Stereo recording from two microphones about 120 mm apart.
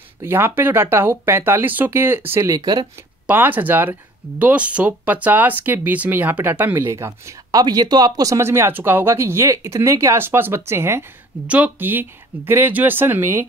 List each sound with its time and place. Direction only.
0.2 s speech: 20° right (ahead or behind)
2.5 s speech: 35° right (ahead or behind)
3.3 s speech: 15° right (ahead or behind)